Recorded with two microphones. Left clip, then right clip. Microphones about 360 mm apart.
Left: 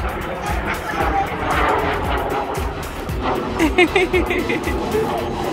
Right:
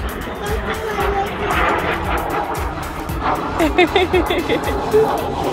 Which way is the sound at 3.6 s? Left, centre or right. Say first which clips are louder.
Even; centre.